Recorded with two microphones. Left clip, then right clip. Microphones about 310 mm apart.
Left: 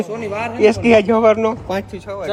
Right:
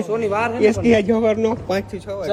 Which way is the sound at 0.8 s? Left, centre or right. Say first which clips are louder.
Left 5 dB; left.